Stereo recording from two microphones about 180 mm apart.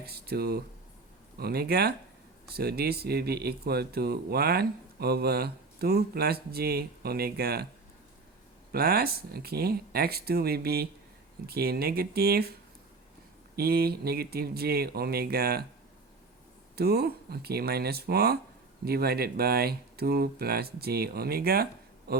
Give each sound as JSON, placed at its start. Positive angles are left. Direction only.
{"t": 0.0, "sound": "speech", "side_deg": -60}
{"t": 8.7, "sound": "speech", "side_deg": -60}
{"t": 13.6, "sound": "speech", "side_deg": -60}
{"t": 16.7, "sound": "speech", "side_deg": -60}